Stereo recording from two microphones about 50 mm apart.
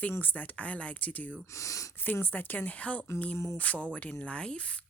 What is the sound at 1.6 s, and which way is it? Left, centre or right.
Speech, left.